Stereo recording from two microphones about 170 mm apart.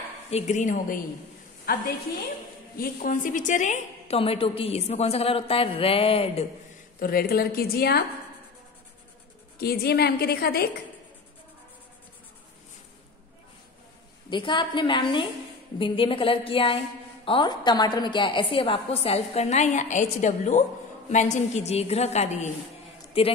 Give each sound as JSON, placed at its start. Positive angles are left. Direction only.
{"t": 0.3, "sound": "speech", "side_deg": 45}
{"t": 2.8, "sound": "a woman's voice", "side_deg": 55}
{"t": 7.0, "sound": "a woman's voice", "side_deg": 60}
{"t": 9.6, "sound": "a woman's voice", "side_deg": 70}
{"t": 14.3, "sound": "a woman's voice", "side_deg": 30}